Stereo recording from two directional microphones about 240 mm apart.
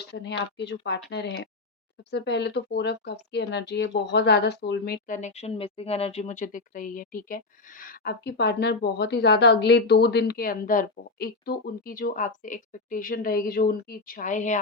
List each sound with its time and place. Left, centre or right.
0.1 s speech: left
2.0 s speech: left